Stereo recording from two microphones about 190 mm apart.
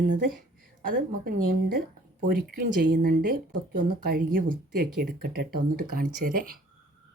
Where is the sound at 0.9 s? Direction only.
50° right (ahead or behind).